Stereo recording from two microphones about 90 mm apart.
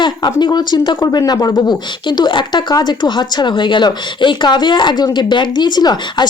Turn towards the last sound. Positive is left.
turn(degrees=50)  # may be behind; listen again after turning